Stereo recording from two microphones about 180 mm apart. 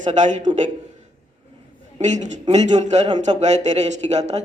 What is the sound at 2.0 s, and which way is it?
A man's voice, 40° right (ahead or behind).